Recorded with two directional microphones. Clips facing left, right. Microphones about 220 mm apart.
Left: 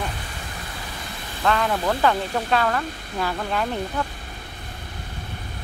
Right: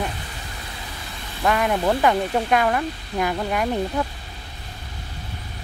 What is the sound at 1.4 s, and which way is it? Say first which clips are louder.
Speech: right 2 dB; 15° right (ahead or behind).